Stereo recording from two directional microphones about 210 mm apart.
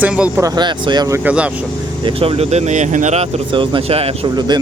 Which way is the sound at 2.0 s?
25° right (ahead or behind).